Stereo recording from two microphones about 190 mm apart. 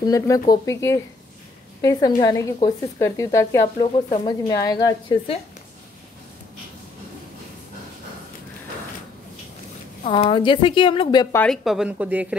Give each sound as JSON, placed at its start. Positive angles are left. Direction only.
{"t": 0.0, "sound": "speech", "side_deg": 20}
{"t": 10.0, "sound": "speech", "side_deg": 25}
{"t": 11.3, "sound": "speech", "side_deg": 5}